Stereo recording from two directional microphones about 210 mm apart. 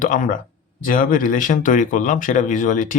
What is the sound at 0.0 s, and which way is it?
Speech, 40° left (ahead or behind).